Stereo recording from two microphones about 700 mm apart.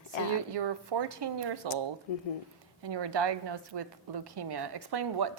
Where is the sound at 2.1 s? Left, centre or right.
Left.